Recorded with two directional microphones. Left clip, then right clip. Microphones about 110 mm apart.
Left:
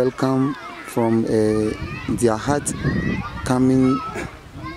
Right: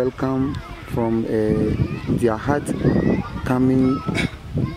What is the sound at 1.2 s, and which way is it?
Speech, 45° left (ahead or behind).